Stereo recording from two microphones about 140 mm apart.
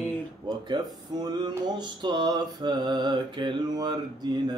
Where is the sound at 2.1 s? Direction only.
30° right (ahead or behind).